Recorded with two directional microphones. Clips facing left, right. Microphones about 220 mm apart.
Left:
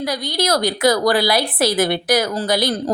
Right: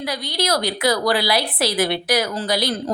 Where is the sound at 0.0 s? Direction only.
45° left (ahead or behind).